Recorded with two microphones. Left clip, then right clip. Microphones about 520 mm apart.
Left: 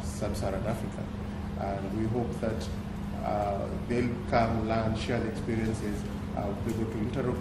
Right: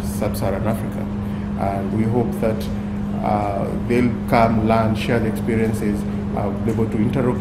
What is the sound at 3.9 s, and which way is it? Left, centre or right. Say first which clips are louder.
Speech: right 10 dB; right.